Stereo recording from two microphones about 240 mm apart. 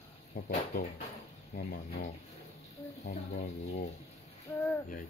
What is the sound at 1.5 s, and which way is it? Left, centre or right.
Speech, left.